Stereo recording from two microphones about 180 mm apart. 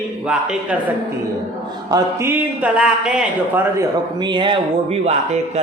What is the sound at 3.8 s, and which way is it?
Speech, 25° right (ahead or behind).